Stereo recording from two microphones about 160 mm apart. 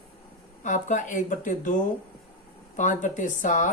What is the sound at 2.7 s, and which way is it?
Speech, 50° left (ahead or behind).